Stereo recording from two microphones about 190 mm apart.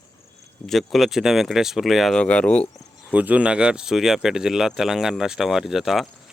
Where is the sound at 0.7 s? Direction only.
Centre (ahead or behind).